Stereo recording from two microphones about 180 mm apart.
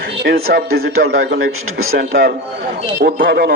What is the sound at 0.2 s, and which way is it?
A man's voice, 60° right (ahead or behind).